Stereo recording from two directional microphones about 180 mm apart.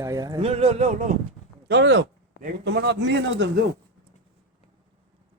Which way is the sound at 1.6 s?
80° right.